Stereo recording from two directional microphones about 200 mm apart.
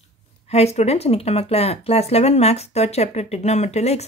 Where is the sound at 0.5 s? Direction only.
30° left (ahead or behind).